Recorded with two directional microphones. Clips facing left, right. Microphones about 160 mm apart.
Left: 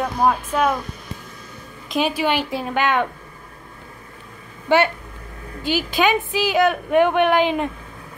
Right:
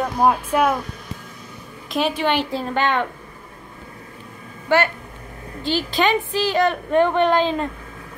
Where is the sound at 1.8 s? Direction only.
5° left (ahead or behind).